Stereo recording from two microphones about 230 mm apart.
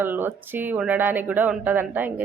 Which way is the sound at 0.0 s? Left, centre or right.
Centre.